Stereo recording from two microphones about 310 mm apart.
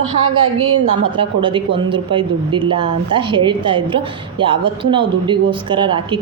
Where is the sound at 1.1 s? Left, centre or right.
Centre.